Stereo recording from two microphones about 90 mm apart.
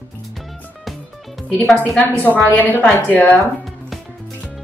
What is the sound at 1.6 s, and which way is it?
A woman's voice, 15° left (ahead or behind).